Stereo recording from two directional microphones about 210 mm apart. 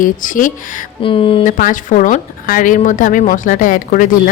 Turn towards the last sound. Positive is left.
turn(degrees=40)  # may be behind; listen again after turning